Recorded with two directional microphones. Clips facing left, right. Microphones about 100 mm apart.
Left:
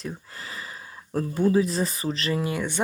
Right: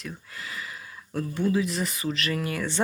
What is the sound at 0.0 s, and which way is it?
Speech, 35° left (ahead or behind).